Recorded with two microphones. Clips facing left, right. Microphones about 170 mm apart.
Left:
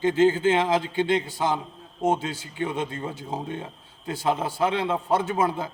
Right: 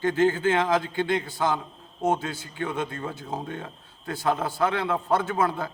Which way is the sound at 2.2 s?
20° left (ahead or behind).